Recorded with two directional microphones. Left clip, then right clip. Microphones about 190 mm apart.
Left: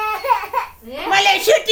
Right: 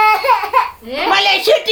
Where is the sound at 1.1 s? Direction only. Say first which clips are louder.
Right 2 dB; centre (ahead or behind).